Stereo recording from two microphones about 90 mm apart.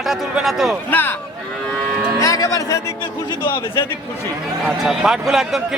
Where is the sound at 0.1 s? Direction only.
5° right (ahead or behind).